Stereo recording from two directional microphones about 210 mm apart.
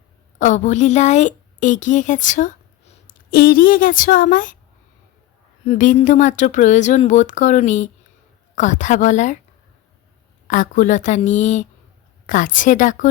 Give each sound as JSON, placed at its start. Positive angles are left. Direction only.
{"t": 0.3, "sound": "a woman's voice", "side_deg": 35}
{"t": 5.6, "sound": "a woman's voice", "side_deg": 40}
{"t": 10.4, "sound": "a woman's voice", "side_deg": 40}